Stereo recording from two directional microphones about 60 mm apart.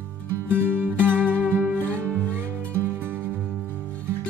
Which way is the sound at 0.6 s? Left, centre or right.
Right.